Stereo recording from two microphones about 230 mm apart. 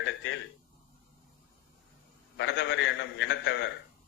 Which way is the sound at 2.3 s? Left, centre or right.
Left.